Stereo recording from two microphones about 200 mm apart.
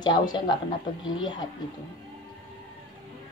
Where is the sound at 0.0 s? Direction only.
20° left (ahead or behind).